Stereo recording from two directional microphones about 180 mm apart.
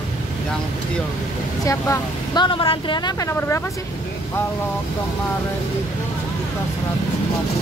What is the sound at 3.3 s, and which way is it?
Speech, 15° left (ahead or behind).